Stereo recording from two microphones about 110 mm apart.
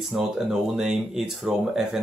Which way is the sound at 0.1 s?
5° right (ahead or behind).